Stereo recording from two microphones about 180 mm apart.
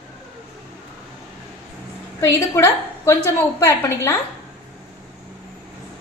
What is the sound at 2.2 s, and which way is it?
A woman's voice, 15° left (ahead or behind).